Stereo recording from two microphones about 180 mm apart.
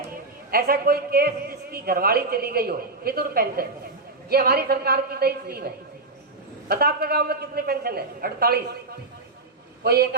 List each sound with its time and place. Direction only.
0.5 s a man's voice: 55° right (ahead or behind)
9.8 s a man's voice: 60° right (ahead or behind)